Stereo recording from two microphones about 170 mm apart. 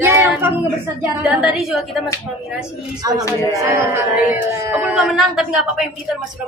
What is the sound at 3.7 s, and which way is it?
Speech, 15° right (ahead or behind).